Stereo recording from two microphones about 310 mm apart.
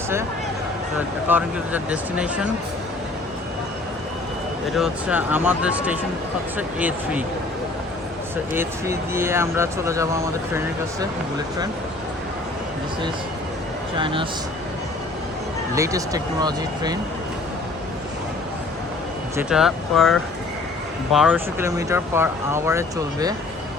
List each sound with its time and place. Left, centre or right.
1.3 s speech: centre
4.7 s speech: centre
8.5 s speech: centre
13.9 s speech: centre
15.7 s speech: centre
19.4 s speech: centre